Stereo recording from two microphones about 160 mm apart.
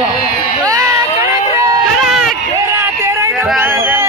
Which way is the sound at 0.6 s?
20° right (ahead or behind).